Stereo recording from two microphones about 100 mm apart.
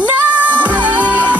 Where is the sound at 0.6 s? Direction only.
15° right (ahead or behind).